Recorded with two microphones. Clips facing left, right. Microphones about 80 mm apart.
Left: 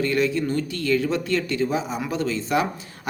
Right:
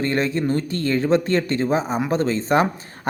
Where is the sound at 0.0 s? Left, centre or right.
Right.